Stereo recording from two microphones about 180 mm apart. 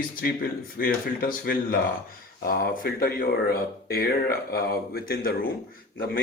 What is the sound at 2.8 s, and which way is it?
Speech, 55° left (ahead or behind).